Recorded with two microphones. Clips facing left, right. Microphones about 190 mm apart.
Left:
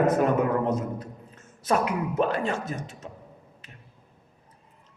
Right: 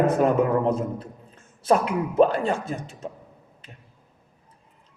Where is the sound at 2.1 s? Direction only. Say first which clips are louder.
Right 8 dB; 30° right (ahead or behind).